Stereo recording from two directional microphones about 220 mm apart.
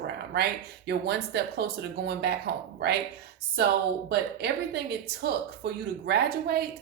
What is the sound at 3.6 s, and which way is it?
A woman's voice, 50° right (ahead or behind).